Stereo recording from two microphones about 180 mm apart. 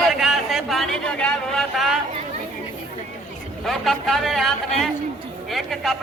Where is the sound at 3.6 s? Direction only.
Centre (ahead or behind).